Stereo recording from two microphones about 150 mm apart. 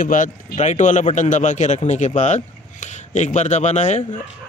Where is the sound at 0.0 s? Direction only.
60° left (ahead or behind).